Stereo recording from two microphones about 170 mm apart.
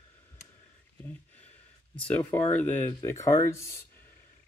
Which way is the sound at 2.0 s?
10° left (ahead or behind).